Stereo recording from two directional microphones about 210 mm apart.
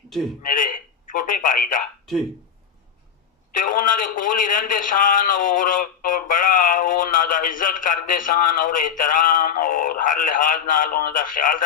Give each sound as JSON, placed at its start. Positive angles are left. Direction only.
{"t": 0.4, "sound": "speech", "side_deg": 40}
{"t": 2.1, "sound": "speech", "side_deg": 0}
{"t": 3.5, "sound": "a man's voice", "side_deg": 40}